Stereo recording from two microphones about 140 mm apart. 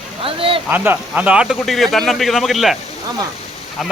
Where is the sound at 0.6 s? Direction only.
15° right (ahead or behind).